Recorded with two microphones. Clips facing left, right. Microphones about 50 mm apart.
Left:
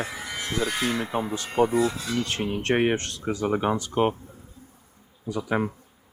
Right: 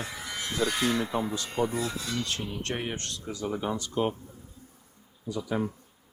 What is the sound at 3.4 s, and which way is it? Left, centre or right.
Speech, left.